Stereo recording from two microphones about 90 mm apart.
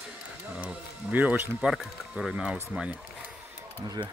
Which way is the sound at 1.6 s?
5° right (ahead or behind).